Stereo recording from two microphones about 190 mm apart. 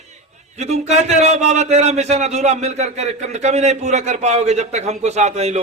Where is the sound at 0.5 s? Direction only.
35° right (ahead or behind).